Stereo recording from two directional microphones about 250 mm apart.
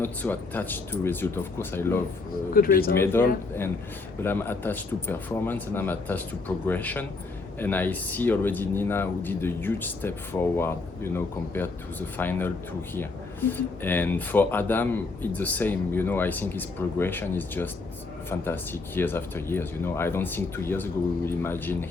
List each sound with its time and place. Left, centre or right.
0.0 s speech: centre
2.5 s a man's voice: left
2.9 s speech: centre
13.5 s speech: centre